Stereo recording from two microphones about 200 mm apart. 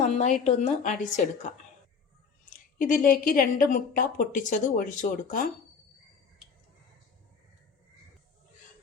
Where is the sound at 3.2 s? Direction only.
45° left (ahead or behind).